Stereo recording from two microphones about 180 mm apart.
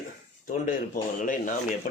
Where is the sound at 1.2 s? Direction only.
45° left (ahead or behind).